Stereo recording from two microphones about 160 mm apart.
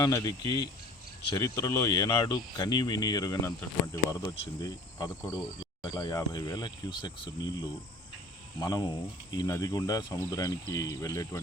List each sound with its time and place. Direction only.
0.0 s speech: 20° left (ahead or behind)
1.4 s speech: 25° left (ahead or behind)